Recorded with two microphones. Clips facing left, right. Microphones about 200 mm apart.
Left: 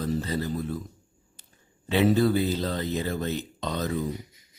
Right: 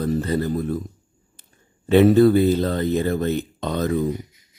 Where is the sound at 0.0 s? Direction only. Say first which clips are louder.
Right 6 dB; 55° right (ahead or behind).